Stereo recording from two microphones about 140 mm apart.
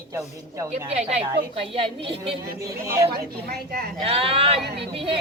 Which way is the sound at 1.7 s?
40° right (ahead or behind).